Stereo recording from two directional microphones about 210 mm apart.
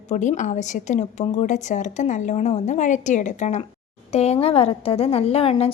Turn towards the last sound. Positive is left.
turn(degrees=30)  # may be behind; listen again after turning